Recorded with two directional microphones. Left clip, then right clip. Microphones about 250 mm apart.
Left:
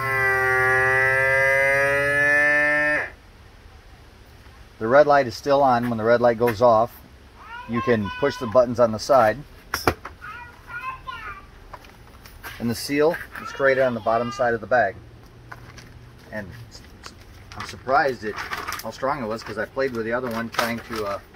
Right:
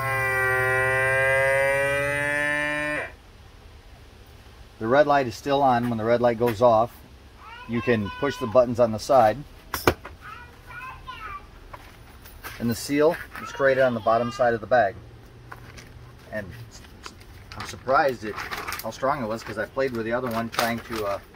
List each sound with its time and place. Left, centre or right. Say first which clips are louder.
0.1 s a sound: left 4 dB; centre
4.8 s a sound: left 4 dB; centre
5.4 s speech: left 3 dB; centre
9.0 s speech: even; centre
12.5 s speech: left 1 dB; centre
17.6 s speech: left 1 dB; centre